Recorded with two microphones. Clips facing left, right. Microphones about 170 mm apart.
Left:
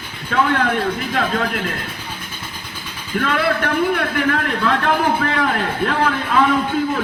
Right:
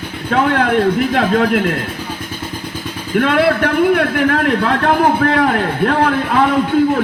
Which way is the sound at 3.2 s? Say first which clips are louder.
Right 6 dB; 55° right (ahead or behind).